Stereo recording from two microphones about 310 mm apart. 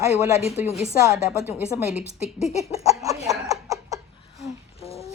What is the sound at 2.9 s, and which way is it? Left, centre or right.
Snicker, centre.